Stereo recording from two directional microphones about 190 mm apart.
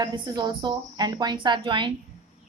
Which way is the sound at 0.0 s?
20° right (ahead or behind).